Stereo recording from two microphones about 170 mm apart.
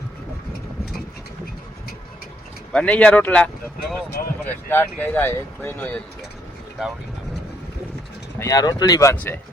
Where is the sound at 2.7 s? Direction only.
5° left (ahead or behind).